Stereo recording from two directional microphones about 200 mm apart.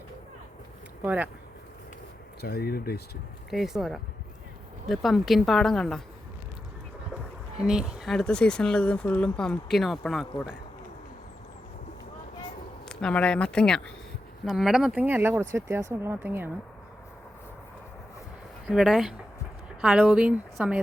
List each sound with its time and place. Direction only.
1.0 s speech: 5° right (ahead or behind)
2.4 s speech: 50° left (ahead or behind)
3.5 s speech: centre (ahead or behind)
7.6 s speech: 5° right (ahead or behind)
12.9 s speech: 5° left (ahead or behind)
18.7 s speech: centre (ahead or behind)